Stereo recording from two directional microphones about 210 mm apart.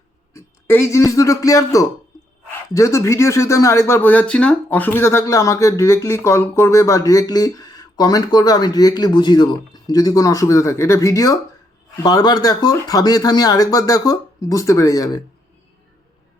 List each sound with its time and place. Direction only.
0.3 s speech: 15° left (ahead or behind)